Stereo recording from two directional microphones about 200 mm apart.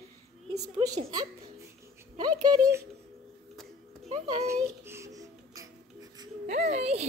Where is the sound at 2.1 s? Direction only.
20° right (ahead or behind).